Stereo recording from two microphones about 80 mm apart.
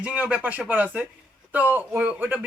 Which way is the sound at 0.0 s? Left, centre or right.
Centre.